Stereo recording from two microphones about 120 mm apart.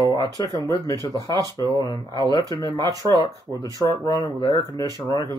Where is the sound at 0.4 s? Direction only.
35° left (ahead or behind).